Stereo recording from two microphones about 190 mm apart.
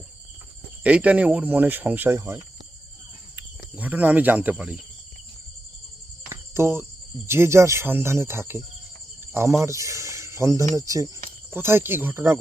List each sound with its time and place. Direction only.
0.9 s speech: 5° right (ahead or behind)
6.2 s cricket: 15° right (ahead or behind)
7.3 s speech: 15° right (ahead or behind)